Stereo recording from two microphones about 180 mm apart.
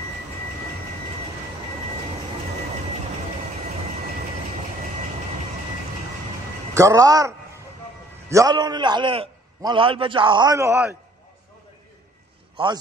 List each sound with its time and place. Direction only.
6.7 s a man's voice: 15° right (ahead or behind)
12.6 s a man's voice: 30° right (ahead or behind)